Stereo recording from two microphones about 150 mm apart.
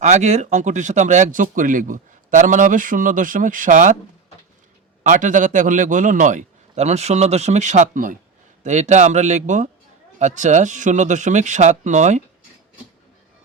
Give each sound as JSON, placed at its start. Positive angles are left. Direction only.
{"t": 0.0, "sound": "speech", "side_deg": -55}
{"t": 5.0, "sound": "speech", "side_deg": -60}
{"t": 8.6, "sound": "speech", "side_deg": -50}